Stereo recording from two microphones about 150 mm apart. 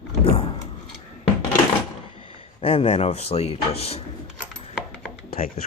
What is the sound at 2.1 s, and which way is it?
Speech, 35° left (ahead or behind).